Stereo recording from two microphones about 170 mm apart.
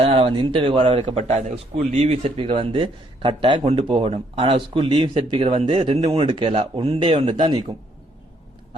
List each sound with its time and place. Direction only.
0.0 s speech: 35° right (ahead or behind)